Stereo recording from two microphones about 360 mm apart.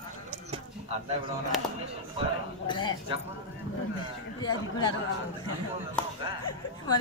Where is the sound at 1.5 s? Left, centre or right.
Centre.